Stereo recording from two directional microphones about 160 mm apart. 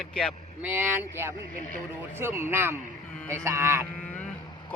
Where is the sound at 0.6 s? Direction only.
15° right (ahead or behind).